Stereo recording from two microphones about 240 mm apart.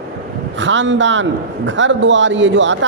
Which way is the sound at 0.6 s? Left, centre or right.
Right.